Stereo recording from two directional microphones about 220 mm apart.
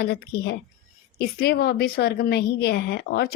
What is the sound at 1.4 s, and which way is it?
Speech, 45° left (ahead or behind).